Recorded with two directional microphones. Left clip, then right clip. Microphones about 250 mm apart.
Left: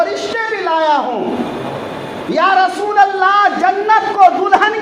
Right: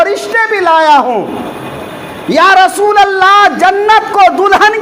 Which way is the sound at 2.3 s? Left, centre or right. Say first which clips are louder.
Right 6 dB; right.